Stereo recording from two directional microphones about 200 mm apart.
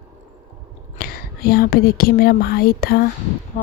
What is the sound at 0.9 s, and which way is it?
Speech, 50° left (ahead or behind).